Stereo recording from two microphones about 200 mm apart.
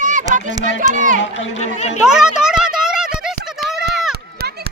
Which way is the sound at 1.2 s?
60° left (ahead or behind).